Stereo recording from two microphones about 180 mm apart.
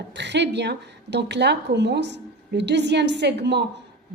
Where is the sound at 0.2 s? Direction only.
75° right (ahead or behind).